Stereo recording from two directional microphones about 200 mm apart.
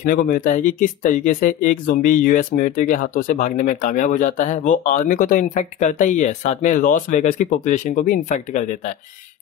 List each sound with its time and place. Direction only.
0.0 s speech: 45° left (ahead or behind)